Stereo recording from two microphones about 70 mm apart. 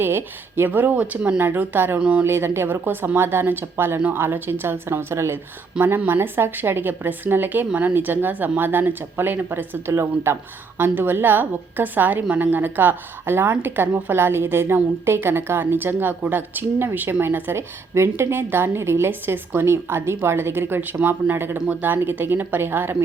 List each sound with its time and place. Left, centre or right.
0.0 s speech: right
2.0 s speech: centre
2.2 s a woman's voice: right
5.7 s speech: centre
6.1 s a woman's voice: right